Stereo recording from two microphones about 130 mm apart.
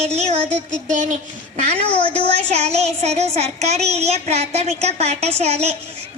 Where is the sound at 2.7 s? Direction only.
55° right (ahead or behind).